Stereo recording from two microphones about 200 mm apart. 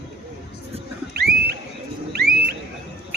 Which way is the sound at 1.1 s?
55° right (ahead or behind).